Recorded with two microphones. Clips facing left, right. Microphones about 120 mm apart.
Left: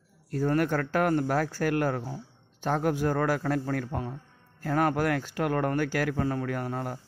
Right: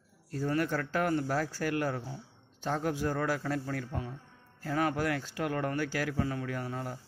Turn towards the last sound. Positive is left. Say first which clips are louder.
# left 5 dB
turn(degrees=55)  # may be behind; listen again after turning